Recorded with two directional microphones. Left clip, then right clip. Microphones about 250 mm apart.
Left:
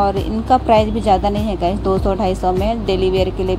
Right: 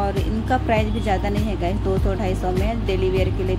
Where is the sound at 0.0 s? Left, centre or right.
Left.